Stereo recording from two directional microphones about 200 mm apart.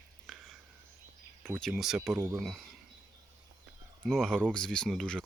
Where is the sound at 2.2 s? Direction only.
10° right (ahead or behind).